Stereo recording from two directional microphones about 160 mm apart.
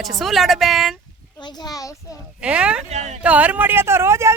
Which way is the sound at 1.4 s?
25° left (ahead or behind).